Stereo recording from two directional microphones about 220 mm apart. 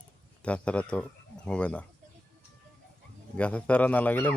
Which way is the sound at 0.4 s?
5° left (ahead or behind).